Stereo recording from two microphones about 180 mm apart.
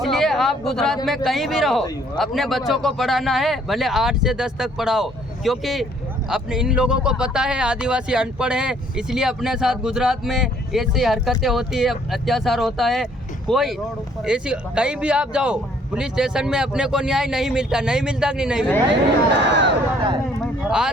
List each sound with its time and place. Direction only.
0.0 s speech: centre (ahead or behind)
19.4 s speech: 75° right (ahead or behind)
20.4 s a sound: 5° right (ahead or behind)